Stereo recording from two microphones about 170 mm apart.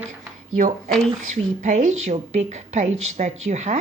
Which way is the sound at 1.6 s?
45° right (ahead or behind).